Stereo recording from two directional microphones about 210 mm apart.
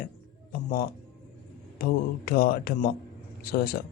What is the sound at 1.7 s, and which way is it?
Speech, 45° left (ahead or behind).